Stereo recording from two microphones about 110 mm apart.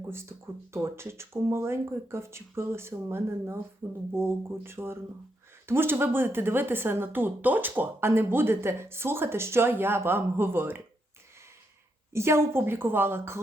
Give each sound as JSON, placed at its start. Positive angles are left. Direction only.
{"t": 0.1, "sound": "speech", "side_deg": -25}
{"t": 12.1, "sound": "speech", "side_deg": -25}